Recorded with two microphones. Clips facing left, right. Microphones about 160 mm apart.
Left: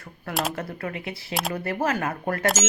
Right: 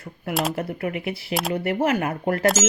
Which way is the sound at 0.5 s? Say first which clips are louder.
Right 5 dB; 20° right (ahead or behind).